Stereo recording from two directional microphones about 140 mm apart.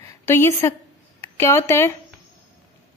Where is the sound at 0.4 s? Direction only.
20° left (ahead or behind).